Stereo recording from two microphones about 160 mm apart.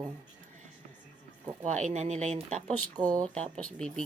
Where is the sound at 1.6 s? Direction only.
50° right (ahead or behind).